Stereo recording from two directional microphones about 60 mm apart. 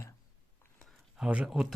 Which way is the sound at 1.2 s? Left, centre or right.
Centre.